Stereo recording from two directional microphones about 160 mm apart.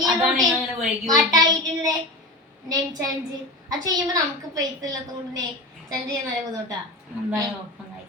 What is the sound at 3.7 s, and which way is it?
A woman's voice, 25° right (ahead or behind).